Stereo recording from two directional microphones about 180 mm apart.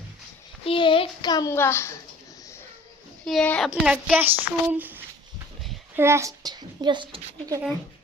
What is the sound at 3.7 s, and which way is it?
Speech, 5° right (ahead or behind).